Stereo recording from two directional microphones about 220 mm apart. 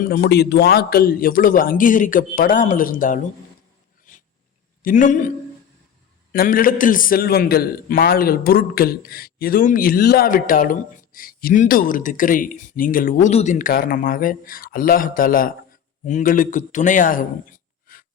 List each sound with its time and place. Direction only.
0.0 s a man's voice: 45° left (ahead or behind)
4.8 s a man's voice: 35° left (ahead or behind)
6.3 s a man's voice: 40° left (ahead or behind)
17.9 s a sound: 40° left (ahead or behind)